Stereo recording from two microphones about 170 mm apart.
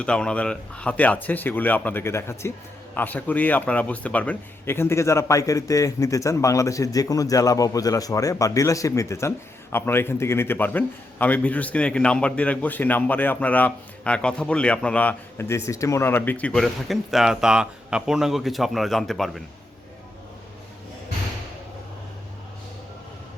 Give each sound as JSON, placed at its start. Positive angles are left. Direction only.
{"t": 0.0, "sound": "a man's voice", "side_deg": 5}